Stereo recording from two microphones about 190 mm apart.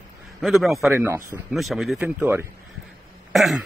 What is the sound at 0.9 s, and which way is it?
Speech, 10° right (ahead or behind).